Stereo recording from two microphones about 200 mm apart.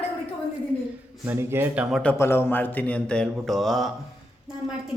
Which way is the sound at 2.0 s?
10° left (ahead or behind).